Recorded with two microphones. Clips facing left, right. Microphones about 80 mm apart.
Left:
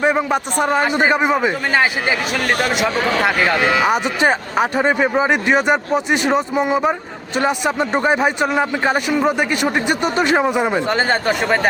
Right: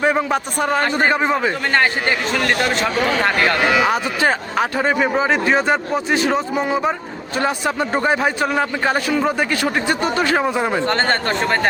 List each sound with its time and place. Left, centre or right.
0.0 s speech: centre